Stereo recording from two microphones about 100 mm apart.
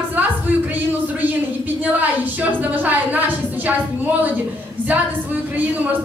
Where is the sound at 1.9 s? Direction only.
15° right (ahead or behind).